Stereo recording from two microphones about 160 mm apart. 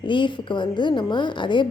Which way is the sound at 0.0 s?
30° left (ahead or behind).